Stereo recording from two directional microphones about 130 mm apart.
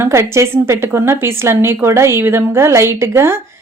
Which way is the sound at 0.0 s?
20° right (ahead or behind).